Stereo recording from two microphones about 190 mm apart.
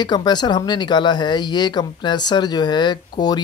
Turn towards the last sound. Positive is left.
turn(degrees=20)  # may be behind; listen again after turning